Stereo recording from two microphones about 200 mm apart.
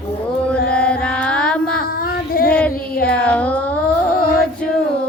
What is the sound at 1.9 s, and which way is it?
Female singing, 45° left (ahead or behind).